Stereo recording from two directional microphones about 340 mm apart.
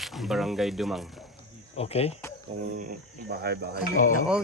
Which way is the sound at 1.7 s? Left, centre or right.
Centre.